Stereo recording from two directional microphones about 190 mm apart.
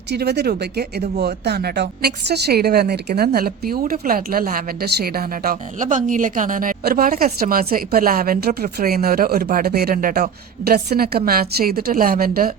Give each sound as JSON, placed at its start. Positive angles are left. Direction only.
{"t": 0.1, "sound": "a woman's voice", "side_deg": -60}